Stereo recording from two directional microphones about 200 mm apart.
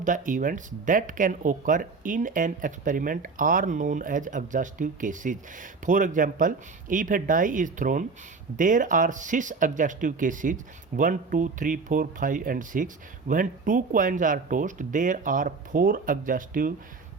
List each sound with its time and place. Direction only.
0.0 s speech: 40° right (ahead or behind)